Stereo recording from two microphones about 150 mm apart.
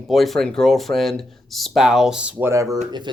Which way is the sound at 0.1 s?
Centre (ahead or behind).